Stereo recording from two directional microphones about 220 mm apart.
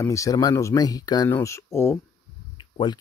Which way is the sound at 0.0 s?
15° left (ahead or behind).